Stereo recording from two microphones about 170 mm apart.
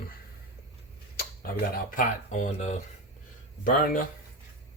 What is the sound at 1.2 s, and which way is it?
Speech, 60° left (ahead or behind).